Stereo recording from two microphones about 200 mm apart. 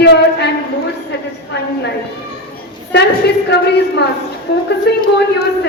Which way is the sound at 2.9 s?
60° left (ahead or behind).